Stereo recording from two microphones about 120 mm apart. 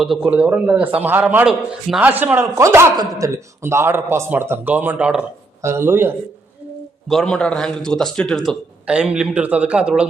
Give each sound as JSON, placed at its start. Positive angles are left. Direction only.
{"t": 0.0, "sound": "a man's voice", "side_deg": -5}
{"t": 5.6, "sound": "a man's voice", "side_deg": -20}
{"t": 7.1, "sound": "speech", "side_deg": 5}
{"t": 8.9, "sound": "a man's voice", "side_deg": -10}